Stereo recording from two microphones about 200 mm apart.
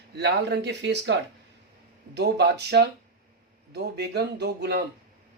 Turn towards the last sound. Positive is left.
turn(degrees=-55)  # may be behind; listen again after turning